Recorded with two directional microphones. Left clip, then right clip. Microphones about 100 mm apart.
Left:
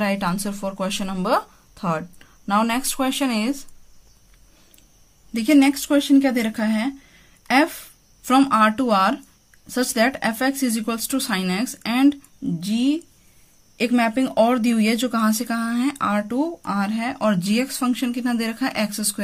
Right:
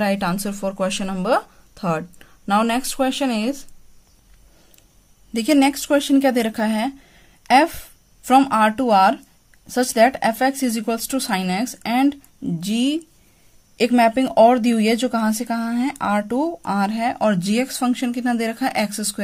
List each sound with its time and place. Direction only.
0.0 s speech: 35° right (ahead or behind)
2.7 s speech: 20° right (ahead or behind)
5.3 s speech: 35° right (ahead or behind); by 12.5 s 20° right (ahead or behind)
12.5 s speech: 60° right (ahead or behind)
13.7 s speech: 35° right (ahead or behind)
15.1 s speech: 10° right (ahead or behind)
16.1 s speech: 25° right (ahead or behind)
16.3 s speech: 40° right (ahead or behind)